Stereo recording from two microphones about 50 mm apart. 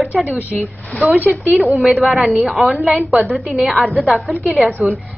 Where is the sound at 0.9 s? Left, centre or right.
Left.